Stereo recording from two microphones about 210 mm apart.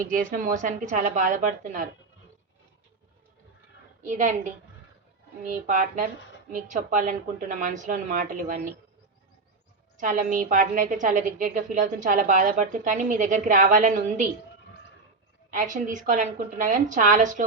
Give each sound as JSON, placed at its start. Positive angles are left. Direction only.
{"t": 0.0, "sound": "a woman's voice", "side_deg": -40}
{"t": 4.0, "sound": "a woman's voice", "side_deg": -35}
{"t": 5.5, "sound": "a woman's voice", "side_deg": -40}
{"t": 10.0, "sound": "a woman's voice", "side_deg": -40}
{"t": 15.4, "sound": "a woman's voice", "side_deg": -40}